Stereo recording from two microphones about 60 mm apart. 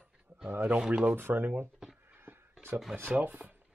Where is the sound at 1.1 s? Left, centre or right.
Right.